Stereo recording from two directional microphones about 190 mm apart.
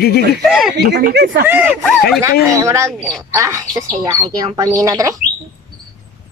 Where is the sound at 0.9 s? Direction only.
60° right (ahead or behind).